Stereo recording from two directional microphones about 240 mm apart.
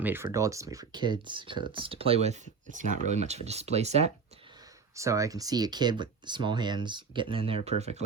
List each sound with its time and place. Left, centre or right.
0.0 s speech: centre; by 4.1 s right
4.9 s speech: centre